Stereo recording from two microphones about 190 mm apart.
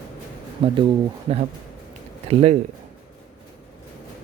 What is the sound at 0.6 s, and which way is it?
Speech, 30° right (ahead or behind).